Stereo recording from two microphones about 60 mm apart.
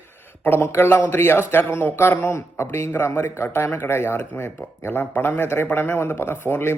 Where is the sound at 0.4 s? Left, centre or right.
Left.